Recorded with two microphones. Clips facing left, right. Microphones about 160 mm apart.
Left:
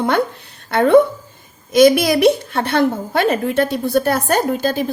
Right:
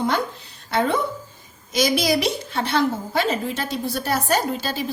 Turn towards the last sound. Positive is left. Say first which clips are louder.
# left 6 dB
turn(degrees=50)  # may be behind; listen again after turning